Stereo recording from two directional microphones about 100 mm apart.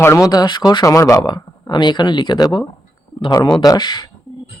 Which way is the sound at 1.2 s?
45° left (ahead or behind).